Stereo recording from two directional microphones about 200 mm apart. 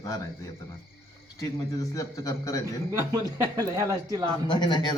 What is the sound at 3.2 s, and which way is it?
Speech, 20° right (ahead or behind).